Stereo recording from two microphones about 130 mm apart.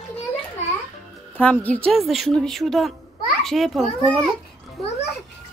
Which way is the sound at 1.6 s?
10° left (ahead or behind).